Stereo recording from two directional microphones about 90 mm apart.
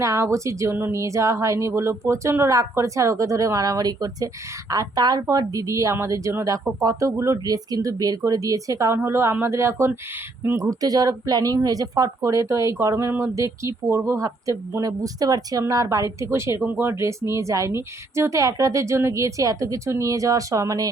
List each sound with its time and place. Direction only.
0.0 s speech: 35° right (ahead or behind)
9.0 s speech: 30° right (ahead or behind)
10.5 s speech: 40° right (ahead or behind)
16.6 s speech: 20° right (ahead or behind)
16.9 s speech: 35° right (ahead or behind)